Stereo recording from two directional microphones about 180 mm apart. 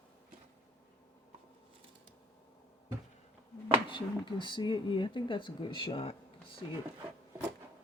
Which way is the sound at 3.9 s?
25° left (ahead or behind).